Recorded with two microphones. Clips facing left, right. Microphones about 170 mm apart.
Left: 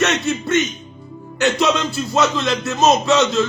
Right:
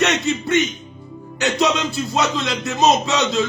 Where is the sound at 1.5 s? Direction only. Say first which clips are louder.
Left 1 dB; 20° right (ahead or behind).